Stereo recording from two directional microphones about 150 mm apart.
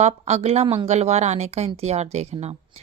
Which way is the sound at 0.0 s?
45° right (ahead or behind).